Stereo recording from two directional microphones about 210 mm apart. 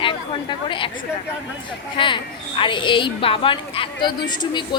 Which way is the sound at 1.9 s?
25° left (ahead or behind).